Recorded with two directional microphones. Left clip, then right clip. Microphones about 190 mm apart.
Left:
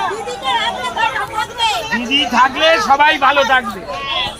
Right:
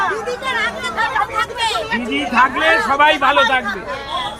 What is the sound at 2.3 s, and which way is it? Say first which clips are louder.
A man's voice: even; 45° left (ahead or behind).